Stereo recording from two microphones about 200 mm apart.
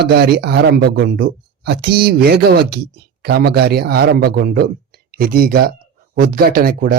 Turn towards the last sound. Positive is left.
turn(degrees=-45)  # may be behind; listen again after turning